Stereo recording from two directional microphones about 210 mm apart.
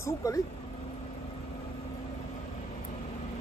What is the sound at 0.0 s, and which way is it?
Speech, 15° left (ahead or behind).